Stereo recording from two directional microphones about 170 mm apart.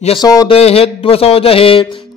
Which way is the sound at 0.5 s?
35° left (ahead or behind).